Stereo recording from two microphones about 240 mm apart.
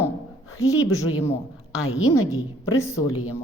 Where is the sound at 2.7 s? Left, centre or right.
Centre.